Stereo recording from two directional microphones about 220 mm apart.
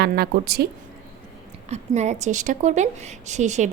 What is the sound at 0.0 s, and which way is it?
Speech, 45° right (ahead or behind).